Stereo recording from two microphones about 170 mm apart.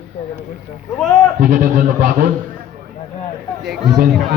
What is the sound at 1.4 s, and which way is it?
Speech, 65° right (ahead or behind).